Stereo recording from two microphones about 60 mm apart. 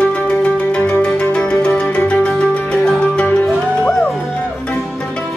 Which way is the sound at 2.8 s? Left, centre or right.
Centre.